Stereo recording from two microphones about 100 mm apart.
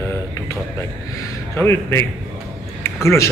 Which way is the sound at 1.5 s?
25° left (ahead or behind).